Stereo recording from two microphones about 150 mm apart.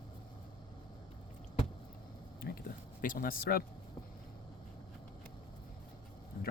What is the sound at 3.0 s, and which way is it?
Speech, 70° left (ahead or behind).